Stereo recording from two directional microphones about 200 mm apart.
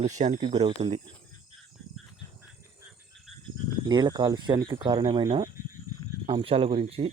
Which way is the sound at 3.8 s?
20° right (ahead or behind).